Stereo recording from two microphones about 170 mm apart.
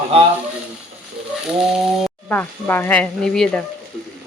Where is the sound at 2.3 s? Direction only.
10° left (ahead or behind).